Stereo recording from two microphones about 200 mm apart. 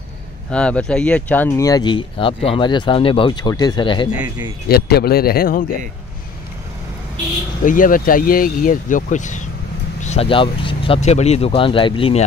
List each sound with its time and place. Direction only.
0.5 s speech: 5° left (ahead or behind); by 4.1 s 25° left (ahead or behind)
4.1 s speech: 5° right (ahead or behind)
4.6 s speech: 50° left (ahead or behind)
7.6 s speech: 40° left (ahead or behind)